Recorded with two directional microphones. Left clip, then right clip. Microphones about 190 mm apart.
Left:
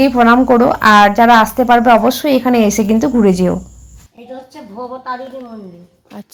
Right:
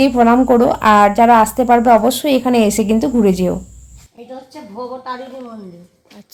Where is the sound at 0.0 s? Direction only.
10° left (ahead or behind).